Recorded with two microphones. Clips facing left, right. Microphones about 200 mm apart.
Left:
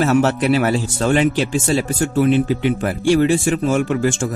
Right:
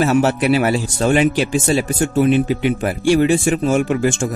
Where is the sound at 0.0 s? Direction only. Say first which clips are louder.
Even; 10° right (ahead or behind).